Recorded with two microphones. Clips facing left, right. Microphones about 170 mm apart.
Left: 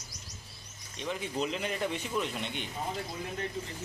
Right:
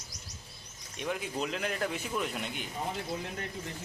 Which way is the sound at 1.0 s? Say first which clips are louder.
Even; 5° right (ahead or behind).